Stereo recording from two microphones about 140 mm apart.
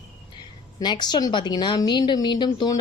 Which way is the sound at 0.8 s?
30° left (ahead or behind).